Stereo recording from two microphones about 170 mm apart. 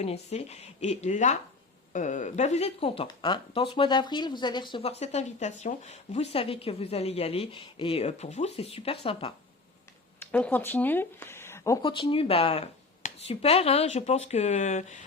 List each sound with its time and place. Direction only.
0.0 s speech: 40° left (ahead or behind)
10.2 s speech: 10° left (ahead or behind)
11.8 s speech: 30° left (ahead or behind)